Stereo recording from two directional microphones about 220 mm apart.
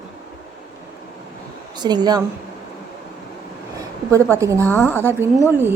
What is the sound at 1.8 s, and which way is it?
Speech, 20° right (ahead or behind).